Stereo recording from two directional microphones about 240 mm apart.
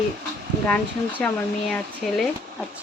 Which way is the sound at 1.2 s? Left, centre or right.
Centre.